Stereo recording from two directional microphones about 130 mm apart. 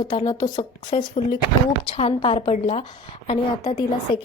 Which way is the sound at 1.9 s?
50° left (ahead or behind).